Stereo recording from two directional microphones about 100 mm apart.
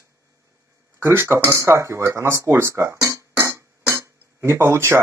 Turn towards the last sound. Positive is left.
turn(degrees=-25)  # may be behind; listen again after turning